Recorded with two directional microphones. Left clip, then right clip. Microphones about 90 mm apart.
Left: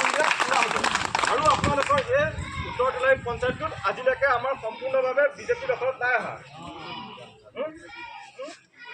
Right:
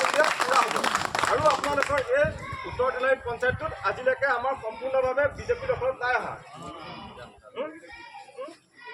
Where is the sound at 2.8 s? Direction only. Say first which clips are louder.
Left 2 dB; 20° right (ahead or behind).